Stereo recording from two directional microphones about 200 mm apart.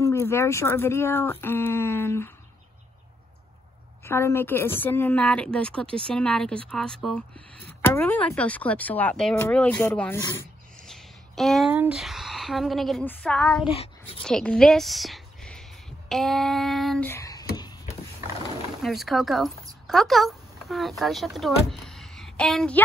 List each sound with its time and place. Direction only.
0.0 s speech: 15° left (ahead or behind)
4.0 s a woman's voice: 10° left (ahead or behind)
16.1 s female singing: centre (ahead or behind)
17.1 s a sound: 15° left (ahead or behind)
18.8 s female singing: centre (ahead or behind)
19.9 s speech: centre (ahead or behind)